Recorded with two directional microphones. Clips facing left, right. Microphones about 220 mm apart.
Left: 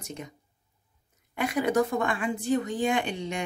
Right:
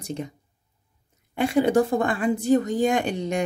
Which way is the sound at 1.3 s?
30° right (ahead or behind).